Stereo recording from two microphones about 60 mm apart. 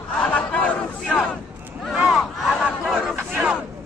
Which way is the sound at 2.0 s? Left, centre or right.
Centre.